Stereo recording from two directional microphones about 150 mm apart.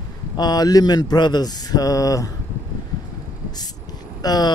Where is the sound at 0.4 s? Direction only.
25° left (ahead or behind).